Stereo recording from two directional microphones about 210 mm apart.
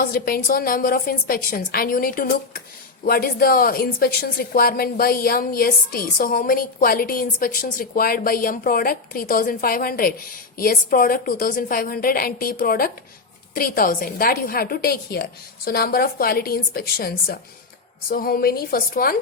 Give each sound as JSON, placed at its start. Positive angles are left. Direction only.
{"t": 0.0, "sound": "a woman's voice", "side_deg": 45}